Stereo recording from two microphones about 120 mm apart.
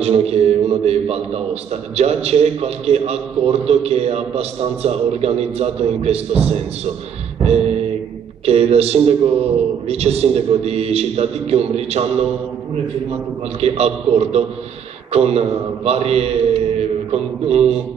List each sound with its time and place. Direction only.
0.0 s a man's voice: 60° right (ahead or behind)
8.5 s a man's voice: 60° right (ahead or behind)
13.6 s a man's voice: 60° right (ahead or behind)